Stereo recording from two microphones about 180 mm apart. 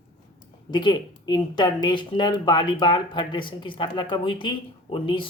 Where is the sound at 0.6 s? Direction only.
25° left (ahead or behind).